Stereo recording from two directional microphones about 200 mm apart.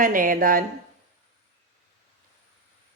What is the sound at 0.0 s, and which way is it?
Speech, 45° right (ahead or behind).